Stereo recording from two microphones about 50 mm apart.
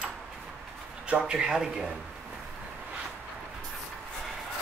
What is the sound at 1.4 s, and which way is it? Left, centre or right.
Speech, centre.